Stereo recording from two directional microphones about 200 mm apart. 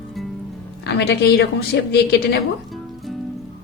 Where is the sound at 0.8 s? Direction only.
55° left (ahead or behind).